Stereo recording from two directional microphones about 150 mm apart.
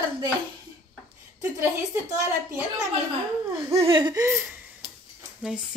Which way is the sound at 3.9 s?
30° right (ahead or behind).